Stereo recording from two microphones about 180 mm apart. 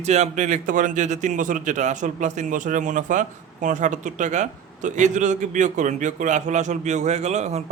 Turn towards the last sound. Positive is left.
turn(degrees=-40)  # may be behind; listen again after turning